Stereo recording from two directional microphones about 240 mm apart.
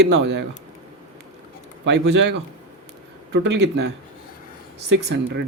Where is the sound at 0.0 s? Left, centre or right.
Right.